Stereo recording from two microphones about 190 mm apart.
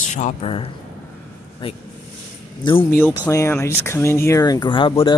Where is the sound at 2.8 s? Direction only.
10° left (ahead or behind); by 5.2 s 25° left (ahead or behind).